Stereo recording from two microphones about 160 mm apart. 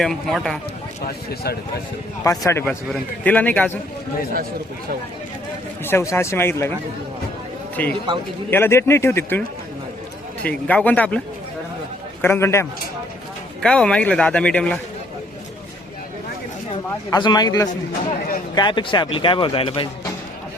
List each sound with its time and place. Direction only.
0.0 s speech: centre (ahead or behind)
1.0 s speech: 75° left (ahead or behind)
2.2 s a man's voice: 20° left (ahead or behind)
5.8 s a man's voice: 15° left (ahead or behind)
7.8 s a man's voice: 10° left (ahead or behind)
10.4 s a man's voice: 5° left (ahead or behind)
12.2 s a man's voice: 15° left (ahead or behind)
13.6 s a man's voice: 5° left (ahead or behind)
17.1 s speech: 25° left (ahead or behind)